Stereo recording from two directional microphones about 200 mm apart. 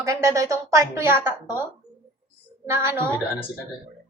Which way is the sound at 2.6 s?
15° right (ahead or behind).